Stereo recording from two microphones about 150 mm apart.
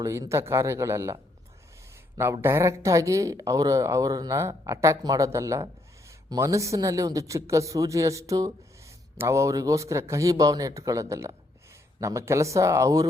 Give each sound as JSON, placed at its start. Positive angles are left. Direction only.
{"t": 0.0, "sound": "speech", "side_deg": -20}